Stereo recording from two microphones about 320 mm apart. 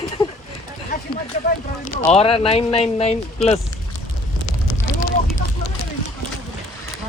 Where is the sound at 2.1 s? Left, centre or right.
Centre.